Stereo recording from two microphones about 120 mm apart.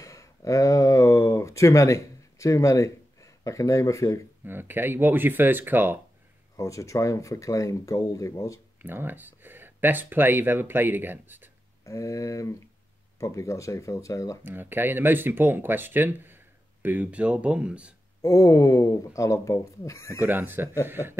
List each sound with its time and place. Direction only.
0.0 s a sound: 25° left (ahead or behind)
4.5 s speech: 15° right (ahead or behind)
6.5 s speech: 25° left (ahead or behind)
8.8 s speech: 15° right (ahead or behind)
11.8 s speech: 25° left (ahead or behind)
14.4 s speech: 15° right (ahead or behind)
18.2 s speech: 30° left (ahead or behind)
20.2 s speech: 15° right (ahead or behind)